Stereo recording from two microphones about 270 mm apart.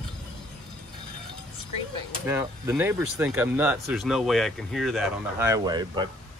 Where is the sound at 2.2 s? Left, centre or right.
Centre.